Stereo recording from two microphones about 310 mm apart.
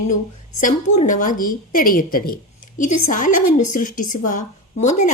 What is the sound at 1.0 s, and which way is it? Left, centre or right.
A woman's voice, left.